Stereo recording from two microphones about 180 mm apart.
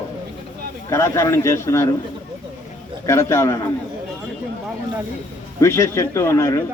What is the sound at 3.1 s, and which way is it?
Speech, 15° left (ahead or behind).